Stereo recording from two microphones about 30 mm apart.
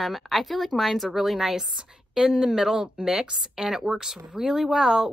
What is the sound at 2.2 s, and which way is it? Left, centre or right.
Speech, centre.